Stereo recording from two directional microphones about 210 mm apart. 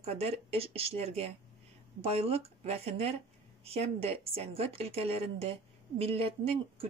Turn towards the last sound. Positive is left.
turn(degrees=-30)  # may be behind; listen again after turning